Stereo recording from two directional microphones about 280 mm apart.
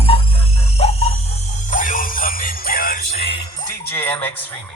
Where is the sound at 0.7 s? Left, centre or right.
Left.